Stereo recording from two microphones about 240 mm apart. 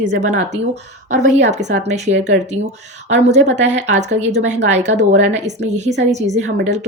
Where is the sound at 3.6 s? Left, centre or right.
Right.